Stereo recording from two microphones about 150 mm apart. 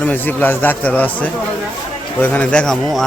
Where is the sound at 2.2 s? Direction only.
10° left (ahead or behind).